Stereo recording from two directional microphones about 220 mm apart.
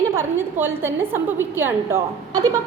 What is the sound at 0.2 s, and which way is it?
A woman's voice, 10° right (ahead or behind).